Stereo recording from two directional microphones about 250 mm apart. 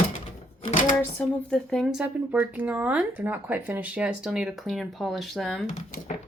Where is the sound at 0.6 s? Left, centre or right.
Left.